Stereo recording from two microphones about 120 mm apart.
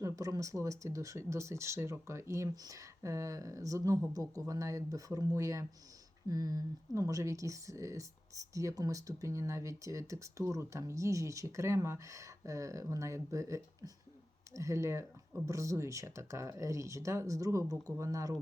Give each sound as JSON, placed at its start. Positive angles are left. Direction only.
{"t": 0.0, "sound": "speech", "side_deg": -30}